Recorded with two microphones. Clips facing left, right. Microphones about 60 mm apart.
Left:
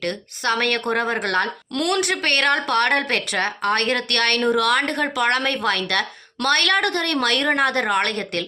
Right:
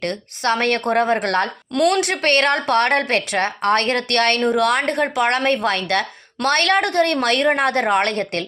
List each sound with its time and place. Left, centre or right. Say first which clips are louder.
0.0 s a woman's voice: right 2 dB; right
1.7 s a woman's voice: right 6 dB; centre
2.2 s a woman's voice: right 4 dB; right
4.4 s a woman's voice: right 1 dB; right